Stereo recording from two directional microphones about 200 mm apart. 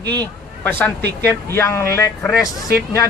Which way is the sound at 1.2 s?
10° left (ahead or behind).